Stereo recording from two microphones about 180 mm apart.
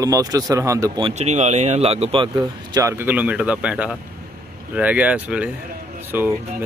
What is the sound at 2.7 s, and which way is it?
A man's voice, 15° right (ahead or behind).